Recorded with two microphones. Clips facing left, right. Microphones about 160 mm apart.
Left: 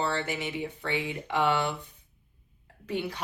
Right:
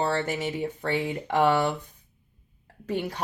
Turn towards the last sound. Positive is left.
turn(degrees=-45)  # may be behind; listen again after turning